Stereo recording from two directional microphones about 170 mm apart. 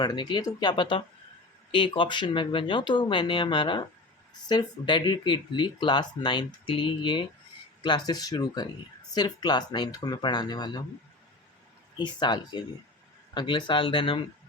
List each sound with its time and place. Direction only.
0.0 s speech: 25° left (ahead or behind)
11.9 s speech: 25° left (ahead or behind)